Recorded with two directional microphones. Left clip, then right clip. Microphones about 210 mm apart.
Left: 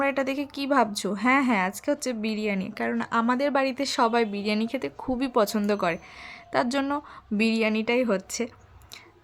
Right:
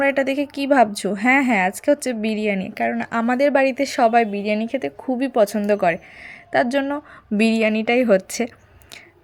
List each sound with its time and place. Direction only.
0.0 s a woman's voice: 10° right (ahead or behind)
7.3 s a woman's voice: 15° right (ahead or behind)